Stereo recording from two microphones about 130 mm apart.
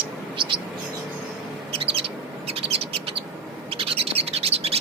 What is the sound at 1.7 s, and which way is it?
Bird, 45° right (ahead or behind).